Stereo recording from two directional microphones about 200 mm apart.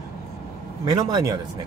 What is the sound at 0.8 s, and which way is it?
Speech, 20° right (ahead or behind).